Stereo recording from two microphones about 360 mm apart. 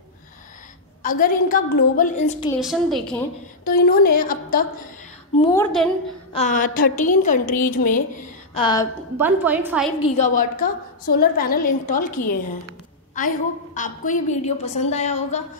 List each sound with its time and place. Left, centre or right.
1.0 s a woman's voice: left
2.6 s a woman's voice: centre
3.6 s a woman's voice: left
5.4 s a woman's voice: centre
6.3 s a woman's voice: left
9.1 s a woman's voice: centre
10.1 s a woman's voice: left
13.7 s a woman's voice: left